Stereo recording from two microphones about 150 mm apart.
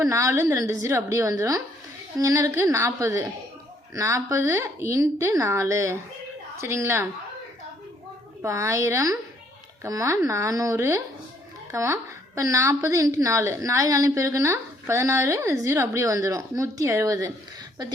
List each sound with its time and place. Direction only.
0.0 s a woman's voice: 20° right (ahead or behind)
8.4 s a woman's voice: 20° right (ahead or behind)